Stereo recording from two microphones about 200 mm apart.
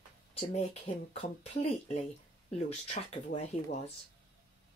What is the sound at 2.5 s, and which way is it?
Speech, 35° left (ahead or behind).